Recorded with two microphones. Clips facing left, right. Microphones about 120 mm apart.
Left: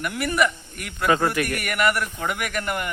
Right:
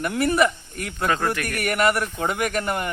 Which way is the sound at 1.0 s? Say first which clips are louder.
Left 3 dB; 10° left (ahead or behind).